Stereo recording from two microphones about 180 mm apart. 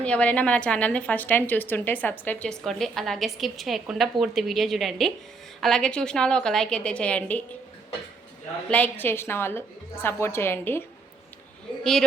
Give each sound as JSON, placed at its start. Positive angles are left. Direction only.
{"t": 0.0, "sound": "a woman's voice", "side_deg": 5}
{"t": 8.7, "sound": "a woman's voice", "side_deg": 10}
{"t": 11.8, "sound": "a woman's voice", "side_deg": 0}